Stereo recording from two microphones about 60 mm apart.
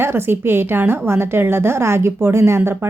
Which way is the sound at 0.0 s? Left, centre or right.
Right.